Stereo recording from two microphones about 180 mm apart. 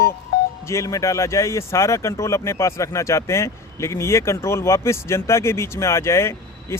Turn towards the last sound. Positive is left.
turn(degrees=15)  # may be behind; listen again after turning